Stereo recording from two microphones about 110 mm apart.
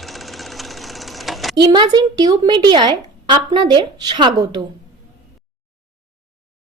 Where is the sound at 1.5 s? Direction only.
45° right (ahead or behind).